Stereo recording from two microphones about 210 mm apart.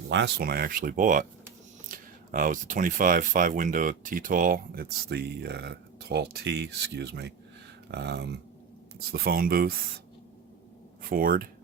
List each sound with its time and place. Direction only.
0.1 s speech: 55° right (ahead or behind)
11.0 s speech: 40° right (ahead or behind)